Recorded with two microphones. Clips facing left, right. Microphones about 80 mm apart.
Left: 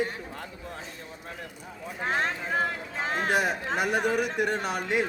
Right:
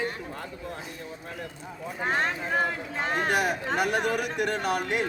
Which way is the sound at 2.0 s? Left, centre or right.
Centre.